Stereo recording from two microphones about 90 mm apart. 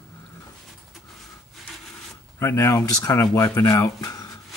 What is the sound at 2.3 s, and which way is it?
A man's voice, 30° left (ahead or behind).